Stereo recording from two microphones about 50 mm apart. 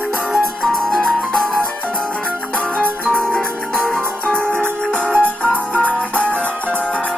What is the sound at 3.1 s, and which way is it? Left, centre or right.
Music, left.